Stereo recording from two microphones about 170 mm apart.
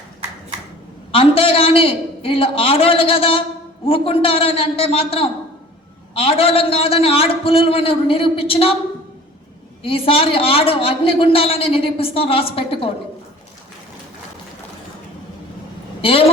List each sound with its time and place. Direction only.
1.1 s a woman's voice: 35° left (ahead or behind)
9.8 s a woman's voice: 35° left (ahead or behind)
16.0 s speech: 35° left (ahead or behind)